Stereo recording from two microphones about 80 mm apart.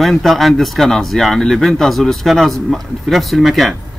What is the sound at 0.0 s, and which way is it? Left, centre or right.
Speech, centre.